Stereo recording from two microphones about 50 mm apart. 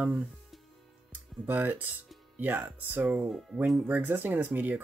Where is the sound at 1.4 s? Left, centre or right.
Right.